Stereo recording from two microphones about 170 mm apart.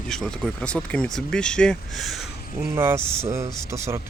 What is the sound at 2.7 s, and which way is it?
Speech, 15° right (ahead or behind).